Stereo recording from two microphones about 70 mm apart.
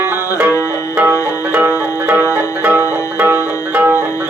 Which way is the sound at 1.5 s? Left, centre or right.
Right.